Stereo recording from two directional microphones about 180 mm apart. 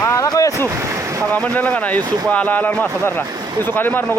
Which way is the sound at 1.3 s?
10° left (ahead or behind).